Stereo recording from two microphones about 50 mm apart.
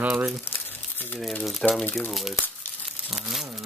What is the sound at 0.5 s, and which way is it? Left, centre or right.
Crumpling, left.